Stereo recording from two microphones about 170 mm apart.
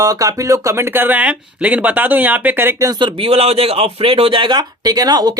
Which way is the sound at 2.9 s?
25° right (ahead or behind).